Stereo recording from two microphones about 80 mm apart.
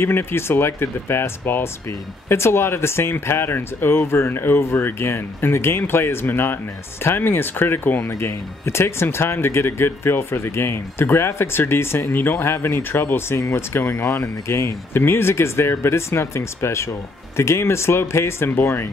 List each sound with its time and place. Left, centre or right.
0.0 s speech: left